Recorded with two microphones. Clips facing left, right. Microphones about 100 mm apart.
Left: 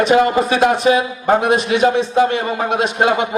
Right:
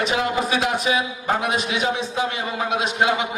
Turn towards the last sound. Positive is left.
turn(degrees=50)  # may be behind; listen again after turning